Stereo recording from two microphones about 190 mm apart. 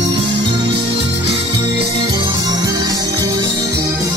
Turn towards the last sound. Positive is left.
turn(degrees=-20)  # may be behind; listen again after turning